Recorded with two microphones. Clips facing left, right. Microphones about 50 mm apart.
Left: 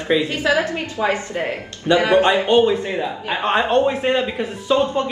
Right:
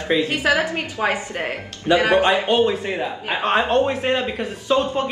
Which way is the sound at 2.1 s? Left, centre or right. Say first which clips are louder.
Left 2 dB; centre.